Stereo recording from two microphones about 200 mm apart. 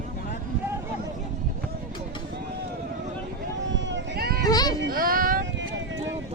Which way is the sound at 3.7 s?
65° right (ahead or behind).